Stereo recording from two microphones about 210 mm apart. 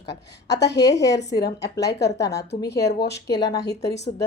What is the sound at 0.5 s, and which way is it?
Speech, 55° left (ahead or behind).